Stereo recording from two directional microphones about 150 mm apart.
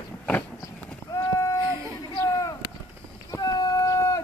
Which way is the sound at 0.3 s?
10° left (ahead or behind).